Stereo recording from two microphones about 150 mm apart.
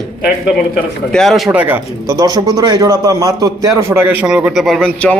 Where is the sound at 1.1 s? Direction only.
Centre (ahead or behind).